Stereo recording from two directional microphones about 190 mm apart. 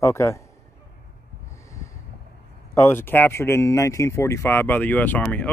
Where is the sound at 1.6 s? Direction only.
15° left (ahead or behind).